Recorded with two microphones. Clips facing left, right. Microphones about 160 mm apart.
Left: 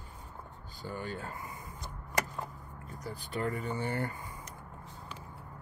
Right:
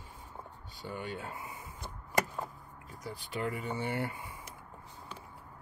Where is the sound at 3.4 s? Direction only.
15° right (ahead or behind).